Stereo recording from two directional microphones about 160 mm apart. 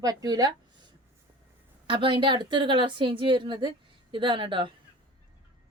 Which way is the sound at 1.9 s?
30° right (ahead or behind).